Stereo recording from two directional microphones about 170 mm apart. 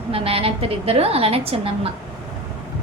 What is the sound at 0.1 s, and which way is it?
A woman's voice, 35° right (ahead or behind).